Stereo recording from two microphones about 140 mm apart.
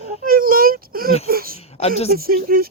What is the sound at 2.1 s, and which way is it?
Speech, 90° right.